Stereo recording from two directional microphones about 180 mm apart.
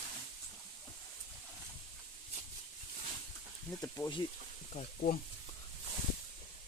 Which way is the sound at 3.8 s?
20° left (ahead or behind).